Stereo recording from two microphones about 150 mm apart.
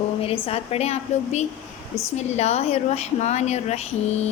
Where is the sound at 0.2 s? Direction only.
40° left (ahead or behind).